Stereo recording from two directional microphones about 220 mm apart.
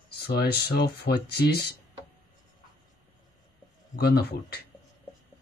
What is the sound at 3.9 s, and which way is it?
Speech, 45° left (ahead or behind).